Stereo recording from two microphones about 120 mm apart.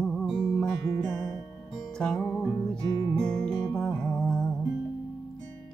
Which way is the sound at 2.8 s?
35° left (ahead or behind).